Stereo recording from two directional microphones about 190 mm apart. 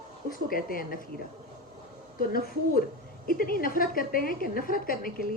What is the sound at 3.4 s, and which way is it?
A woman's voice, 50° left (ahead or behind).